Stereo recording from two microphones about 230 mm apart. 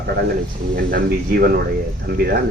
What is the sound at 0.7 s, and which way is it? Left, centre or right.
Speech, right.